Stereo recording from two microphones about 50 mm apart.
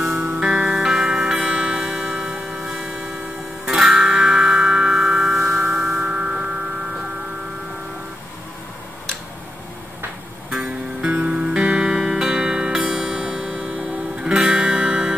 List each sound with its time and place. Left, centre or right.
0.2 s music: right; by 5.5 s centre
5.7 s a sound: centre
10.5 s music: centre
11.1 s music: right
11.8 s music: centre